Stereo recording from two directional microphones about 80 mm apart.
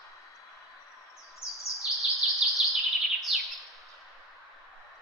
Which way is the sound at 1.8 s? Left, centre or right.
Centre.